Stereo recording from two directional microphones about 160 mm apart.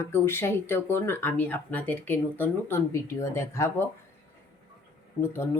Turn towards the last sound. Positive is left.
turn(degrees=15)  # may be behind; listen again after turning